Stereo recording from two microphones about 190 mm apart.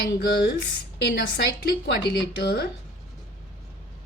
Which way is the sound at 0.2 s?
55° left (ahead or behind).